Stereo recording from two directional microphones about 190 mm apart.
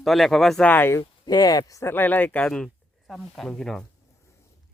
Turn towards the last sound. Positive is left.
turn(degrees=5)  # may be behind; listen again after turning